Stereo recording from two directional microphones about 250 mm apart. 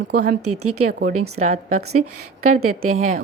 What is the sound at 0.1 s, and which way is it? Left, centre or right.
Speech, right.